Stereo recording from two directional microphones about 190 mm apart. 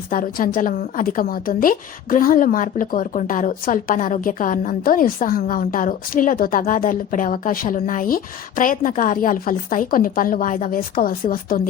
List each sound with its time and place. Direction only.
0.1 s a woman's voice: 45° left (ahead or behind)